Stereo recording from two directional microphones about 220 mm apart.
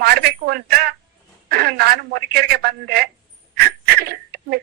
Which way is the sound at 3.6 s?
45° right (ahead or behind).